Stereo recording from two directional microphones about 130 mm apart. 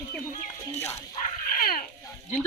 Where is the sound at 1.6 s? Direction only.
90° left.